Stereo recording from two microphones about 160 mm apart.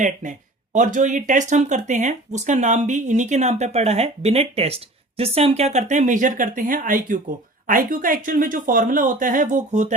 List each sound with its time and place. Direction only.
0.0 s speech: 55° right (ahead or behind)